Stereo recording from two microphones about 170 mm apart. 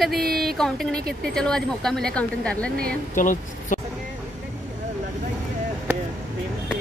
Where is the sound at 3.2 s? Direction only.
50° left (ahead or behind).